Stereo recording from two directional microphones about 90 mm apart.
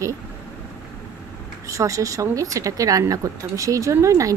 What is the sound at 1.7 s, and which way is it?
Speech, 35° right (ahead or behind).